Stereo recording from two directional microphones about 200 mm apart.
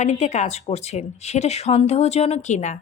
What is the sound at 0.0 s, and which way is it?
A woman's voice, 35° left (ahead or behind).